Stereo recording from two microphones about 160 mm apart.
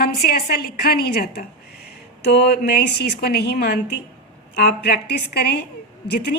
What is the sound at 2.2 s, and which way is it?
A woman's voice, 90° left.